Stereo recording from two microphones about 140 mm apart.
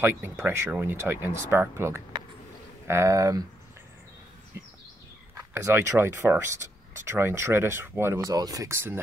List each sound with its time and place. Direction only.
0.0 s speech: 15° right (ahead or behind)
5.3 s speech: 20° right (ahead or behind)